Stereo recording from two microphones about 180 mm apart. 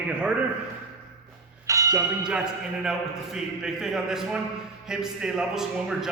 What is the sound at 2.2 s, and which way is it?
A man's voice, 5° right (ahead or behind).